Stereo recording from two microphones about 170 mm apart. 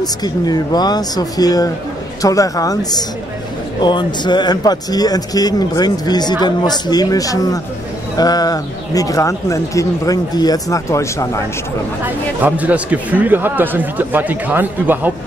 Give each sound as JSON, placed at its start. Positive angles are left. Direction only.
{"t": 0.0, "sound": "speech", "side_deg": 25}
{"t": 12.0, "sound": "speech", "side_deg": -10}